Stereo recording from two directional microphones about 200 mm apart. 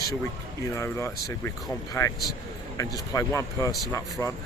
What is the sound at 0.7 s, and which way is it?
Speech, 15° left (ahead or behind).